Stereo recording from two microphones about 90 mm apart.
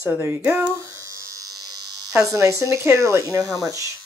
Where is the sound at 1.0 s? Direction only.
40° right (ahead or behind).